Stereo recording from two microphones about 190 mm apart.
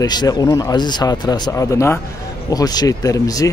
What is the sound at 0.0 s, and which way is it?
Speech, 20° left (ahead or behind).